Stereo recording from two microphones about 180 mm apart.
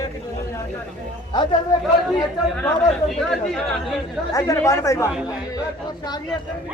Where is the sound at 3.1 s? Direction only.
Centre (ahead or behind).